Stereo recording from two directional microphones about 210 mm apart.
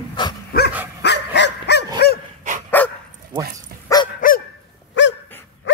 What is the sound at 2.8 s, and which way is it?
Dog, 10° left (ahead or behind).